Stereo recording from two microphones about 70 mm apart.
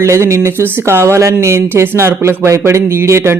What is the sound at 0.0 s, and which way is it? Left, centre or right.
Speech, right.